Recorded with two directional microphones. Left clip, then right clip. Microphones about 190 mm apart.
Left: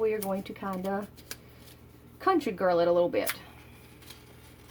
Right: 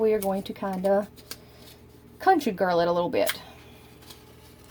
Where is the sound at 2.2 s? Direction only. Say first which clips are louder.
Right 5 dB; 50° right (ahead or behind).